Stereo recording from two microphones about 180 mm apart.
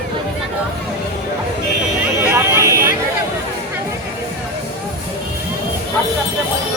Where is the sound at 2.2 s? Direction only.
15° right (ahead or behind).